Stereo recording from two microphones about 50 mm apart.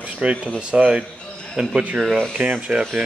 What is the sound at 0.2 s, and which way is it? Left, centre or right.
Speech, right.